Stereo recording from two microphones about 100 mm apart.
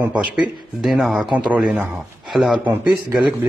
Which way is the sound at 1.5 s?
10° right (ahead or behind).